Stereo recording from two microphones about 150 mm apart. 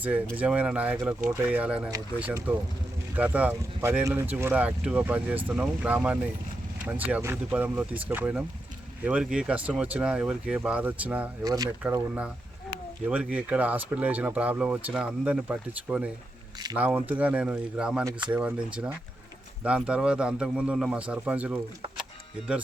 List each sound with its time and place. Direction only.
0.3 s speech: 10° right (ahead or behind)
11.4 s speech: 25° right (ahead or behind)
11.8 s speech: 10° right (ahead or behind)